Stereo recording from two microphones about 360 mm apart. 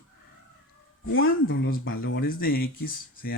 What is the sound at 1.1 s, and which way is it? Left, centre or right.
Speech, left.